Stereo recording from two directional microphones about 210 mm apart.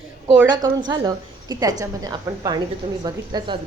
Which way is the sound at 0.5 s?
20° right (ahead or behind).